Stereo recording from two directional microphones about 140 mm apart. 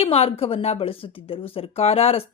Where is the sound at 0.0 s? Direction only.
45° left (ahead or behind).